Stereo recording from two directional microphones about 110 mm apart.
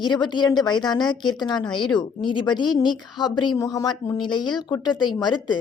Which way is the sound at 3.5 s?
35° left (ahead or behind).